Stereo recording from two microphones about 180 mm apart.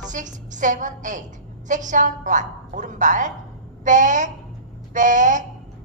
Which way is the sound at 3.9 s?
45° right (ahead or behind).